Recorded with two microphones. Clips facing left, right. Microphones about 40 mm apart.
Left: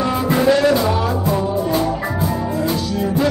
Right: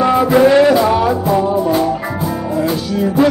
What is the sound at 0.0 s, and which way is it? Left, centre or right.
Music, right.